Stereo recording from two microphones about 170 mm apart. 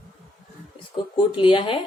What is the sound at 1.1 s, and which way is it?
Speech, 30° left (ahead or behind).